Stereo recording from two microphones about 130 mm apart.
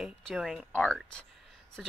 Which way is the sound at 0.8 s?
5° left (ahead or behind).